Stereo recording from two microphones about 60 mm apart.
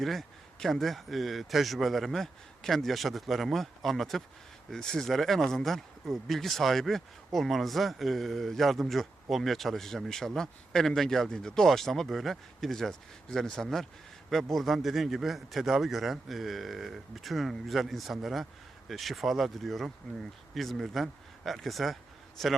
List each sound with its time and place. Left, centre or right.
0.0 s speech: centre